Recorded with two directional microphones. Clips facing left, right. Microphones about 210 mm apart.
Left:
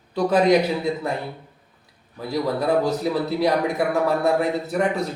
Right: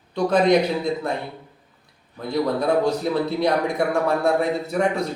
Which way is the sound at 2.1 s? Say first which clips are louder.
Right 1 dB; 5° left (ahead or behind).